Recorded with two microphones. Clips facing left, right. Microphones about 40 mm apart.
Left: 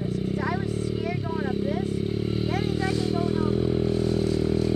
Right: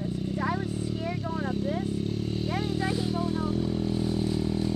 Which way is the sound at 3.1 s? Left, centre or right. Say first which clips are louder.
Left 4 dB; left.